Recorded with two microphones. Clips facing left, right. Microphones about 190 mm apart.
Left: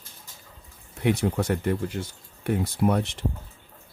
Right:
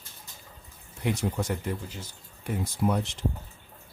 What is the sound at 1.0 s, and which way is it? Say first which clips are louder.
Speech: left 5 dB; 65° left (ahead or behind).